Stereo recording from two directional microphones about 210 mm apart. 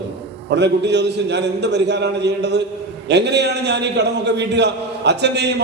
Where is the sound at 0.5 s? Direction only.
55° right (ahead or behind).